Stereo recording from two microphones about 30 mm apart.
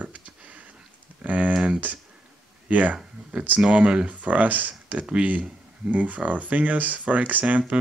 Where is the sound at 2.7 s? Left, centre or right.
Right.